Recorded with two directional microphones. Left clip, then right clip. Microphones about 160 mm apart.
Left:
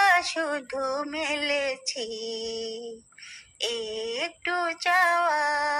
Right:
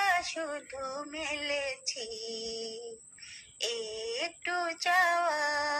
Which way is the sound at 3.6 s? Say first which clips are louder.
Left 5 dB; 20° left (ahead or behind).